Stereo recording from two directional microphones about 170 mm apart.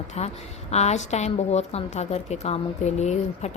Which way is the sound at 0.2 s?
40° left (ahead or behind).